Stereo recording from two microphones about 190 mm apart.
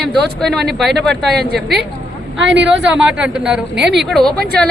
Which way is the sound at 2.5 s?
70° right (ahead or behind).